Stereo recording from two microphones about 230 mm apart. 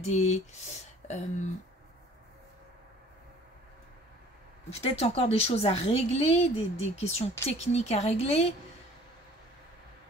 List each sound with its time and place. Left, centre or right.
0.0 s speech: left
4.6 s a woman's voice: left